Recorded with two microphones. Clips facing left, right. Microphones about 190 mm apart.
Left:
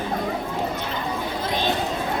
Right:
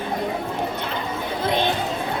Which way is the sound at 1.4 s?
60° right (ahead or behind).